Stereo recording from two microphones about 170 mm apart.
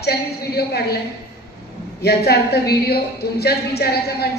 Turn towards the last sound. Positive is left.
turn(degrees=70)  # may be behind; listen again after turning